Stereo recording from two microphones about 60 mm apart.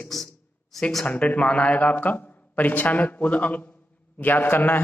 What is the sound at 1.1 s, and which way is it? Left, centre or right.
Speech, left.